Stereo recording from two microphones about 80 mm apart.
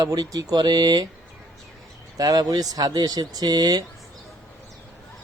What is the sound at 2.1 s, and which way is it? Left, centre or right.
Speech, right.